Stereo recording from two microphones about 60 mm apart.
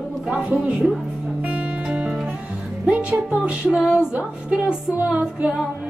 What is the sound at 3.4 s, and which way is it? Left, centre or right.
Music, right.